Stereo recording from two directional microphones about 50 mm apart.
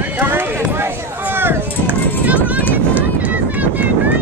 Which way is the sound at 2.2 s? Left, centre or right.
Right.